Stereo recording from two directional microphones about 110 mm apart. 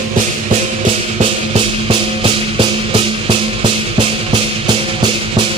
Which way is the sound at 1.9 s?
50° right (ahead or behind).